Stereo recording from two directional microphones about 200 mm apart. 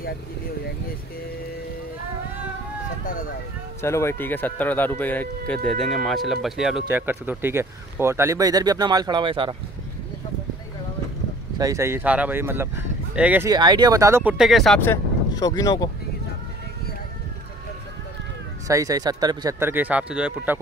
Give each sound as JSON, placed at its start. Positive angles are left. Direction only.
{"t": 3.8, "sound": "speech", "side_deg": 15}
{"t": 11.5, "sound": "speech", "side_deg": -15}
{"t": 13.5, "sound": "speech", "side_deg": -20}
{"t": 14.3, "sound": "speech", "side_deg": 0}
{"t": 18.7, "sound": "speech", "side_deg": -15}
{"t": 19.7, "sound": "speech", "side_deg": -5}